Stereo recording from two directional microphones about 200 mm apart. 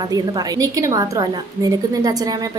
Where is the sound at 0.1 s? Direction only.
20° right (ahead or behind).